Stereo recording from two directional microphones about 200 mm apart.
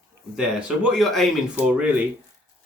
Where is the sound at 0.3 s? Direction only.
5° right (ahead or behind).